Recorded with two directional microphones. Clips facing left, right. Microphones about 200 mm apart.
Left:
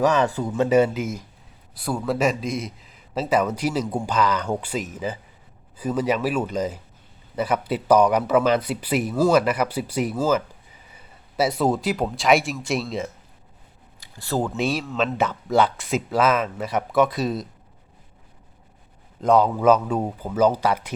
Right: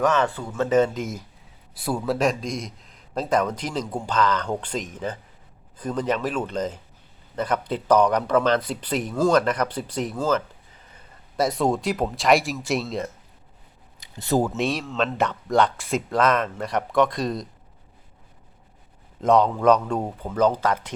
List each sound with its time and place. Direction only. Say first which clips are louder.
0.1 s a man's voice: left 2 dB; 15° left (ahead or behind)
14.0 s a sound: right 3 dB; 20° right (ahead or behind)
14.4 s a man's voice: left 1 dB; centre (ahead or behind)
19.2 s a man's voice: left 1 dB; 5° left (ahead or behind)